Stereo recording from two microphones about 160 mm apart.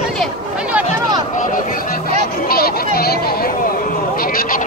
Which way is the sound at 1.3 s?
60° left (ahead or behind).